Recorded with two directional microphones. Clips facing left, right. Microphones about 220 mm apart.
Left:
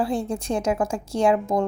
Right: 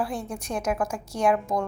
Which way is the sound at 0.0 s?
25° left (ahead or behind).